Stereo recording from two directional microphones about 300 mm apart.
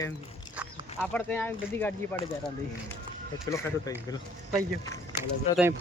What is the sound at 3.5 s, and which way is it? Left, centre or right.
Speech, centre.